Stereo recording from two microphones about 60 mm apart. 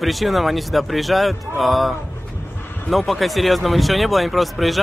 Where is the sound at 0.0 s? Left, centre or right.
Centre.